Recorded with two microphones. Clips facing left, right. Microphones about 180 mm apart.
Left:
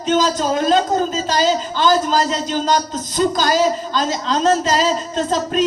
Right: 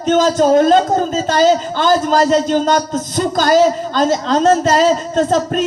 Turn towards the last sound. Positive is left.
turn(degrees=-50)  # may be behind; listen again after turning